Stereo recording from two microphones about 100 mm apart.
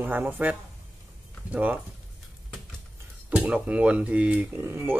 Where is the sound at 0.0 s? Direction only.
20° right (ahead or behind).